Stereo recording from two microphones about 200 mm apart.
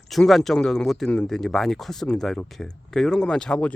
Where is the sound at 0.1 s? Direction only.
Centre (ahead or behind).